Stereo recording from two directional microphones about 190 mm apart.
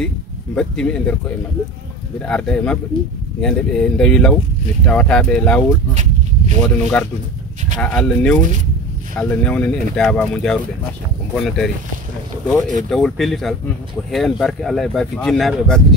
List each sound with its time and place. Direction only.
0.6 s speech: 5° left (ahead or behind)
5.9 s a sound: 40° right (ahead or behind)
6.6 s speech: 5° left (ahead or behind)